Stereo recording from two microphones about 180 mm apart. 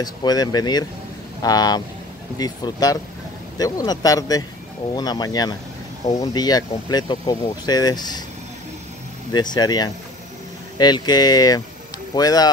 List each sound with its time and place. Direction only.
0.0 s speech: 20° left (ahead or behind)
9.3 s speech: 25° left (ahead or behind)